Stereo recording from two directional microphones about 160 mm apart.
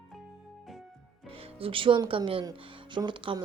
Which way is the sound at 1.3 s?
35° right (ahead or behind).